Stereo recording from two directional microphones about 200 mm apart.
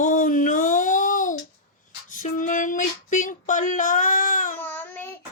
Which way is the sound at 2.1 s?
40° left (ahead or behind).